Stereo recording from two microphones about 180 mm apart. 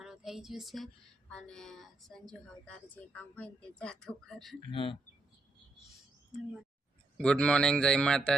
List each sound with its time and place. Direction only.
0.0 s a sound: 5° right (ahead or behind)
1.3 s a woman's voice: 5° left (ahead or behind)
4.7 s speech: 30° left (ahead or behind)
7.2 s a woman's voice: 5° left (ahead or behind)